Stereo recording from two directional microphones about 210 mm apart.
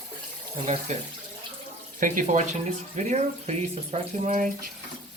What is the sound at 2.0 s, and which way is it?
Speech, 40° right (ahead or behind).